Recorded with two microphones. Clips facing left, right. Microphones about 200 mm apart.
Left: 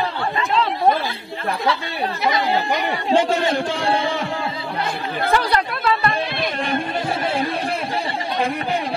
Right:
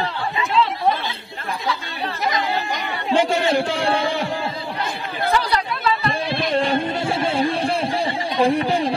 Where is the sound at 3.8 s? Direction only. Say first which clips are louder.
Even; 30° left (ahead or behind).